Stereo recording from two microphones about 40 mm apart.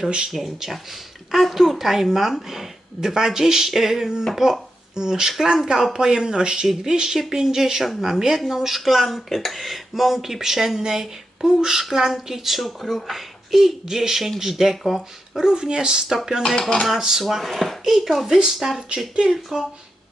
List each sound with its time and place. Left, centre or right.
0.3 s speech: centre
15.4 s speech: centre
16.0 s speech: centre
16.6 s dishes: left
17.0 s speech: centre
18.3 s speech: centre